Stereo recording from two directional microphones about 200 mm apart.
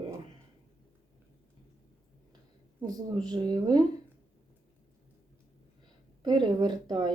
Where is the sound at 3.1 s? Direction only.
20° right (ahead or behind).